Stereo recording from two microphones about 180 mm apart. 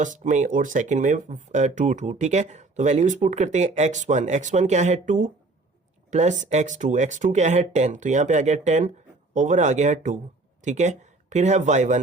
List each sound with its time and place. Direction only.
0.0 s speech: 45° right (ahead or behind)